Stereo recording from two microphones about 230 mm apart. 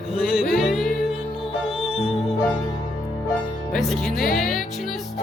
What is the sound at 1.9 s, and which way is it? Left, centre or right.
Music, left.